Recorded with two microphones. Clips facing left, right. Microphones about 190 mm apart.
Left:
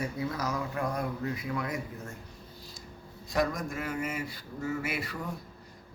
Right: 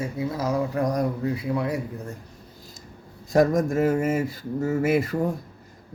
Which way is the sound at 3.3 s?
45° right (ahead or behind).